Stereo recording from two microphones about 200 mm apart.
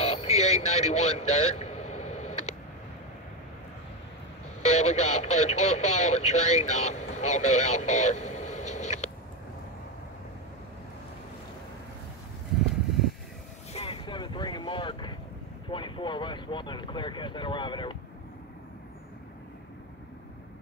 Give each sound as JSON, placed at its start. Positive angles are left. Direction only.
{"t": 0.0, "sound": "vehicle", "side_deg": 30}
{"t": 4.6, "sound": "speech", "side_deg": 30}
{"t": 13.7, "sound": "boat", "side_deg": 25}
{"t": 15.7, "sound": "speech", "side_deg": 25}